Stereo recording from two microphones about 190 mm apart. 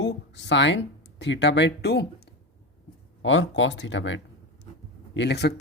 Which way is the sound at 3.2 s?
85° left.